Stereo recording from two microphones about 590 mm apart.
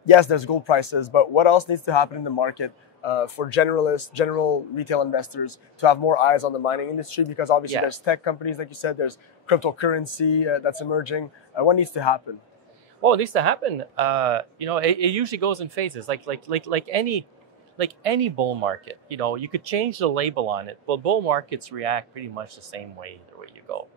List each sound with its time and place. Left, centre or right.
0.0 s speech: left
4.7 s speech: left
5.2 s speech: left
5.8 s speech: left
13.0 s speech: right
17.7 s speech: right